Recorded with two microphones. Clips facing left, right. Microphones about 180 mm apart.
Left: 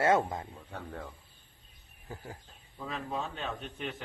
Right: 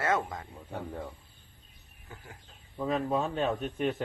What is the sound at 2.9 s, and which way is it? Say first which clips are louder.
Speech: right 8 dB; 35° right (ahead or behind).